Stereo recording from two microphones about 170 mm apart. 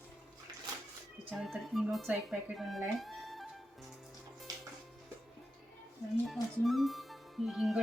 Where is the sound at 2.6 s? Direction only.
Centre (ahead or behind).